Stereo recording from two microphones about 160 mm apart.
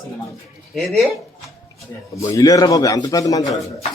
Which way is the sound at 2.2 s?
20° left (ahead or behind).